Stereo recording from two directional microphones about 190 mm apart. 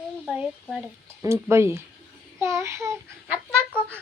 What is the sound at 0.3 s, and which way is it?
Speech, centre (ahead or behind).